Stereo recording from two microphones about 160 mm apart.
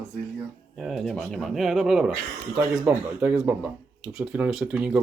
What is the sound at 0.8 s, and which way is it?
Speech, centre (ahead or behind).